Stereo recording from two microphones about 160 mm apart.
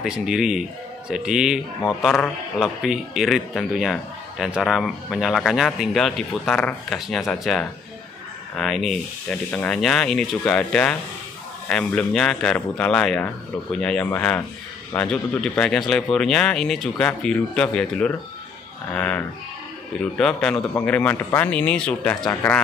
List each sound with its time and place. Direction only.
0.0 s a man's voice: 5° right (ahead or behind)
22.2 s speech: 20° left (ahead or behind)